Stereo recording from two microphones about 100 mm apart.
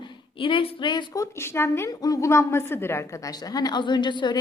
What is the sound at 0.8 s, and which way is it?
Speech, 50° left (ahead or behind).